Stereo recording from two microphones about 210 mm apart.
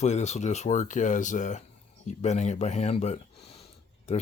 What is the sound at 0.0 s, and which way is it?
Speech, 35° left (ahead or behind).